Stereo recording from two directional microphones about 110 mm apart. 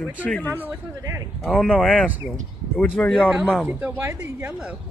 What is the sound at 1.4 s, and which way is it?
Speech, 5° left (ahead or behind).